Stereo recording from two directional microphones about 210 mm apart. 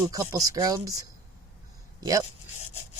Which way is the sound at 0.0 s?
15° right (ahead or behind).